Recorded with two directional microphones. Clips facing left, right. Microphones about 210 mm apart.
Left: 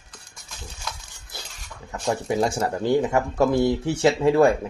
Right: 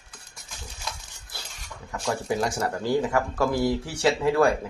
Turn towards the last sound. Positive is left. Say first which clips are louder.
# left 4 dB
turn(degrees=25)  # may be behind; listen again after turning